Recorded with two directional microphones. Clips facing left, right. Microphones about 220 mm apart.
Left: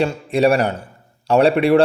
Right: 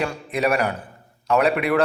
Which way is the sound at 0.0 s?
30° left (ahead or behind).